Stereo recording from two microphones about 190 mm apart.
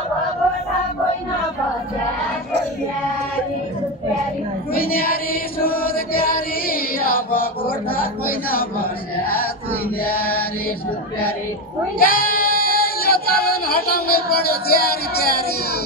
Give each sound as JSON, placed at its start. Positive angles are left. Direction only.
{"t": 4.7, "sound": "chant", "side_deg": 50}
{"t": 10.0, "sound": "mantra", "side_deg": 50}
{"t": 12.0, "sound": "female singing", "side_deg": 50}